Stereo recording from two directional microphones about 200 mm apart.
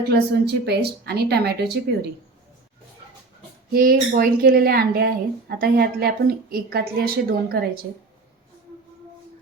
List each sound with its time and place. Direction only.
0.1 s a woman's voice: 55° right (ahead or behind)
3.7 s a woman's voice: 50° right (ahead or behind)